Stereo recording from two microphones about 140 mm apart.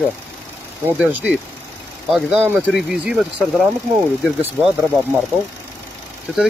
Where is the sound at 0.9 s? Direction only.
10° right (ahead or behind).